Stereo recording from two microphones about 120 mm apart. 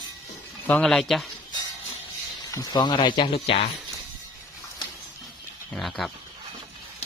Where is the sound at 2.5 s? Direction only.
35° left (ahead or behind); by 3.6 s 50° left (ahead or behind).